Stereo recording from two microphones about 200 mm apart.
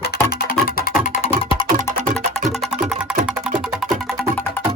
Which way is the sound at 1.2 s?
30° left (ahead or behind).